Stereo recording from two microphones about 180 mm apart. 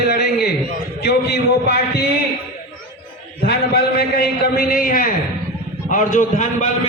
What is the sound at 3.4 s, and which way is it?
A man's voice, 60° left (ahead or behind).